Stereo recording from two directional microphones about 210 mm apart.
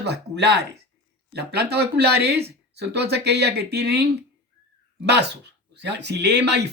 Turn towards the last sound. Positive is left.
turn(degrees=-55)  # may be behind; listen again after turning